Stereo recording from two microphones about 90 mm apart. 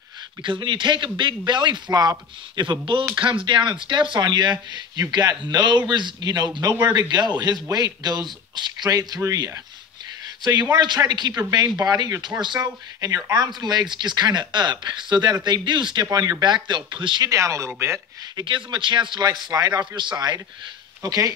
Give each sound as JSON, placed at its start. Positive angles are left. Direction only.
{"t": 0.4, "sound": "a man's voice", "side_deg": -65}
{"t": 9.2, "sound": "speech", "side_deg": -35}
{"t": 10.4, "sound": "a man's voice", "side_deg": -50}
{"t": 17.2, "sound": "speech", "side_deg": -35}
{"t": 18.4, "sound": "a man's voice", "side_deg": -65}